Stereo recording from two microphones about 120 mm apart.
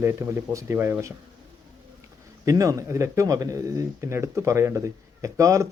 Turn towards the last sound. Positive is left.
turn(degrees=-25)  # may be behind; listen again after turning